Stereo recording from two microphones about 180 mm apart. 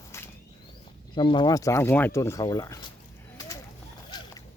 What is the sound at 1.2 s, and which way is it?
Speech, 25° left (ahead or behind).